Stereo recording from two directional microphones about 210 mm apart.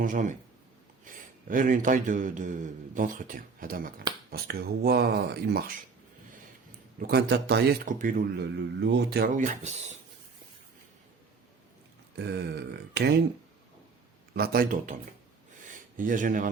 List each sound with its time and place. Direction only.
0.0 s speech: 40° right (ahead or behind)
8.4 s speech: 55° right (ahead or behind); by 9.9 s 35° right (ahead or behind)
12.1 s speech: 50° right (ahead or behind)
14.3 s speech: 45° right (ahead or behind)